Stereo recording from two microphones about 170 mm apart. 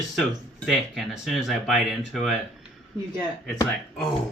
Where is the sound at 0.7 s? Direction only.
Centre (ahead or behind).